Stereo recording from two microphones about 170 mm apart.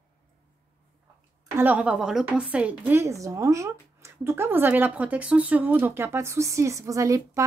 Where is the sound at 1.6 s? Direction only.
10° right (ahead or behind).